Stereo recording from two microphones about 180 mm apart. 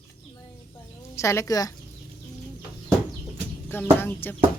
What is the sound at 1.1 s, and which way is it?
Speech, 15° left (ahead or behind).